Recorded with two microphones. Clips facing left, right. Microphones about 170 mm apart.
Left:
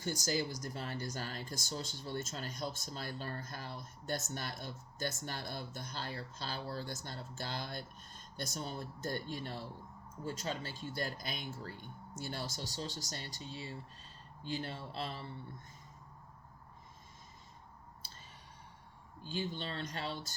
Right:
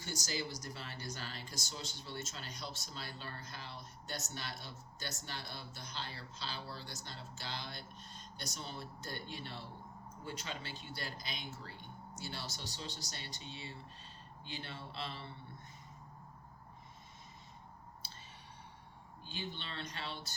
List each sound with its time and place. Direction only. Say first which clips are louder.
0.0 s speech: left 5 dB; 45° left (ahead or behind)
19.2 s speech: left 6 dB; 45° left (ahead or behind)